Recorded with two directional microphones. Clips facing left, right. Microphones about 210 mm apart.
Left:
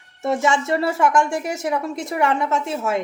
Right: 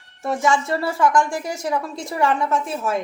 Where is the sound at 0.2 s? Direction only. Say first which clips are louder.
Left 1 dB; 25° left (ahead or behind).